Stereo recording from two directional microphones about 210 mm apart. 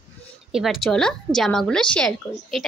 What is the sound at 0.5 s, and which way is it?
A woman's voice, centre (ahead or behind).